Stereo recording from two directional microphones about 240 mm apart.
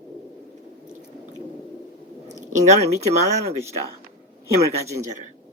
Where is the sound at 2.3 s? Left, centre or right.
Right.